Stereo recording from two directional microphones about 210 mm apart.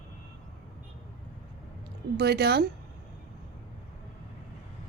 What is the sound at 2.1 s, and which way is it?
Speech, 50° right (ahead or behind).